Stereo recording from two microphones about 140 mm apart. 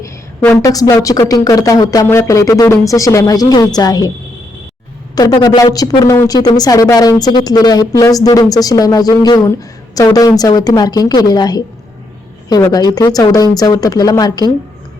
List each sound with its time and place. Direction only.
0.6 s speech: 25° left (ahead or behind)
5.1 s speech: 30° left (ahead or behind)
12.7 s speech: 30° left (ahead or behind)